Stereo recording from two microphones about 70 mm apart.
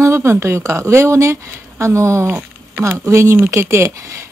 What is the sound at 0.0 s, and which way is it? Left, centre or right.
Speech, right.